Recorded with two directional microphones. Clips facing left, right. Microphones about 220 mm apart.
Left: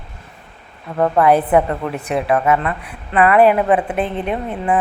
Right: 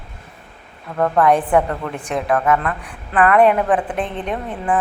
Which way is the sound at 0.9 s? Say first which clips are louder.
Left 2 dB; 10° left (ahead or behind).